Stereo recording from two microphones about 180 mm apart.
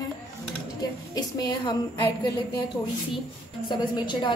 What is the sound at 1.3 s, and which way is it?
Speech, 20° left (ahead or behind).